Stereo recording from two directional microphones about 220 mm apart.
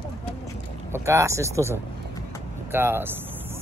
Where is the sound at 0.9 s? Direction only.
10° right (ahead or behind).